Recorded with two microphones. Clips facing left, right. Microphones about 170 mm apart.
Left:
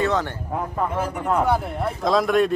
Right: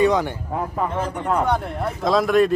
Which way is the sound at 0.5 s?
5° left (ahead or behind).